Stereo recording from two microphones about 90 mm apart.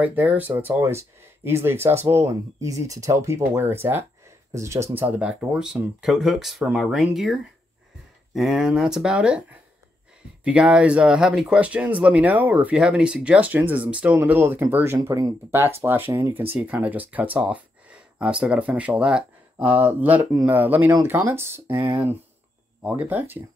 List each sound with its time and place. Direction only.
0.0 s speech: 20° right (ahead or behind)
4.9 s speech: 15° right (ahead or behind)
16.5 s speech: 15° right (ahead or behind)